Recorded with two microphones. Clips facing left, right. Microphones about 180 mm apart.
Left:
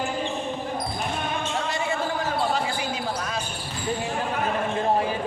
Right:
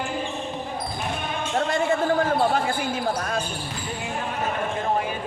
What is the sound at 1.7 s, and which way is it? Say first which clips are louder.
Basketball bounce: right 9 dB; 50° right (ahead or behind).